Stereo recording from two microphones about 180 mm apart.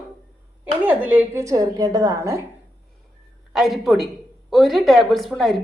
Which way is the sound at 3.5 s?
Centre (ahead or behind).